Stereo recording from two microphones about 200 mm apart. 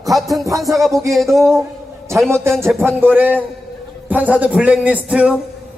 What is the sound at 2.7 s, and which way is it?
A man's voice, 5° right (ahead or behind).